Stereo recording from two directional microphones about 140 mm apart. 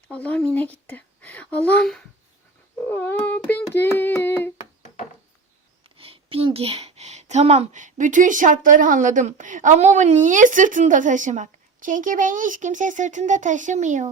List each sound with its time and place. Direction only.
0.1 s speech: 10° left (ahead or behind)
2.8 s hands: 15° left (ahead or behind)
6.0 s speech: 40° right (ahead or behind); by 14.1 s 60° right (ahead or behind)